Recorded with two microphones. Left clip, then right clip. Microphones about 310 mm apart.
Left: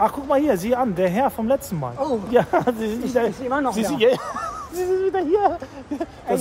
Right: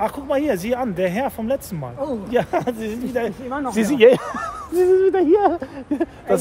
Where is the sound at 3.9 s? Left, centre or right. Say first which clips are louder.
Right 7 dB; right.